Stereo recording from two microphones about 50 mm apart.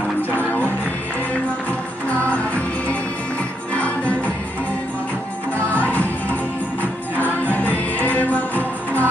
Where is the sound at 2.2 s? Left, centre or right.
Left.